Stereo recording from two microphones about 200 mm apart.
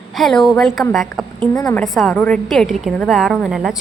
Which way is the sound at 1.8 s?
Centre (ahead or behind).